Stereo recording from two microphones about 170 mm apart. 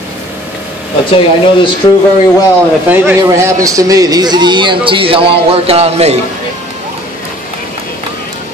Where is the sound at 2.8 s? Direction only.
10° right (ahead or behind); by 6.2 s 40° right (ahead or behind).